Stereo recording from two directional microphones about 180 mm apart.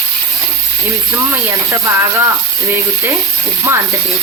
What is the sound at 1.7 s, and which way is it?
Speech, 15° right (ahead or behind).